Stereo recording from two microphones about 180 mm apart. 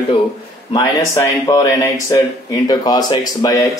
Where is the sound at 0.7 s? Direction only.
20° left (ahead or behind).